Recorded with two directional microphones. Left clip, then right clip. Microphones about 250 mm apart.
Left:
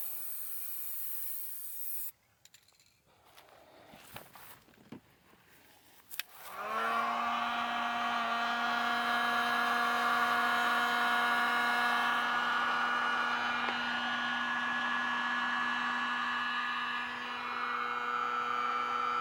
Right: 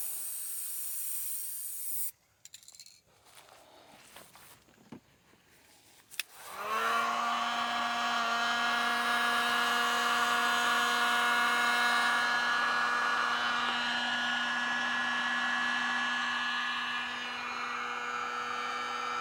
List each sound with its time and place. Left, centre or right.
0.0 s steam: centre
4.9 s boat: left
6.5 s hair dryer: centre